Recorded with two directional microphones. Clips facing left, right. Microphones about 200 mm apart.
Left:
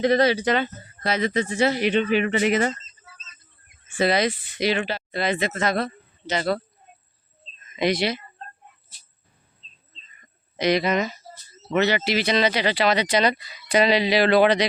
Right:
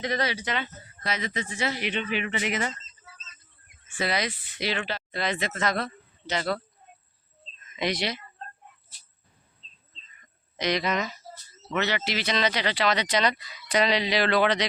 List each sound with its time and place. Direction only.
0.0 s speech: 30° left (ahead or behind)
3.9 s speech: 25° left (ahead or behind)
4.5 s speech: 15° left (ahead or behind)
7.6 s speech: 5° left (ahead or behind)
10.6 s speech: 10° left (ahead or behind)